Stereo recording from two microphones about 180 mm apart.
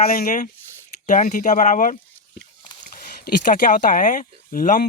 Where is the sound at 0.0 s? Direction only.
55° left (ahead or behind).